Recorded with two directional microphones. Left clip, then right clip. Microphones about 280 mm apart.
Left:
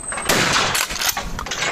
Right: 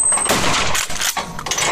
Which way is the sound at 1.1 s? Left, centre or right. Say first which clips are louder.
Right 3 dB; right.